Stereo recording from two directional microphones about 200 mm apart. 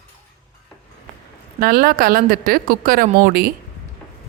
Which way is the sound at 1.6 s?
50° right (ahead or behind).